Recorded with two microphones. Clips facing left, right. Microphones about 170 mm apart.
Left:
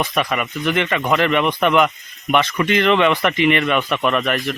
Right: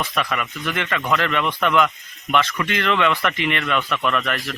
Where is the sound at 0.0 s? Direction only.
20° left (ahead or behind).